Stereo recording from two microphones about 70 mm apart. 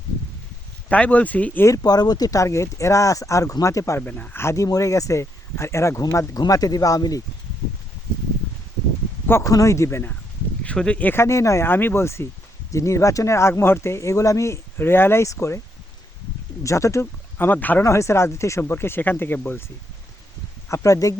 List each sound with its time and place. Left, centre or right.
0.9 s speech: centre
1.6 s speech: left
4.0 s speech: left
4.5 s speech: left
9.4 s speech: left
10.6 s speech: centre
11.1 s speech: left
11.6 s speech: left
14.8 s speech: left
16.6 s speech: left
17.3 s speech: left
17.8 s speech: left
18.6 s speech: left
20.7 s speech: left